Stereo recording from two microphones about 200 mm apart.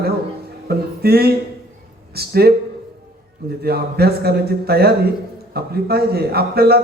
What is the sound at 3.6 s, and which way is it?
A man's voice, 50° right (ahead or behind).